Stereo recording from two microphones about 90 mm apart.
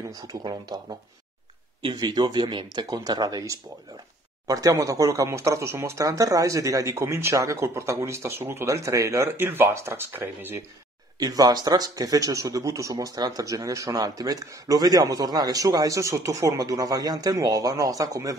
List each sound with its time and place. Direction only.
0.4 s speech: 50° right (ahead or behind); by 10.6 s 25° right (ahead or behind)
11.1 s speech: 45° right (ahead or behind)